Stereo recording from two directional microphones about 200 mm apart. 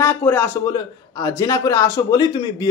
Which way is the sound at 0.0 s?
10° left (ahead or behind).